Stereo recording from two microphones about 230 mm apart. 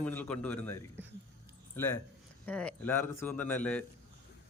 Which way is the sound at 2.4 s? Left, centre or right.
Centre.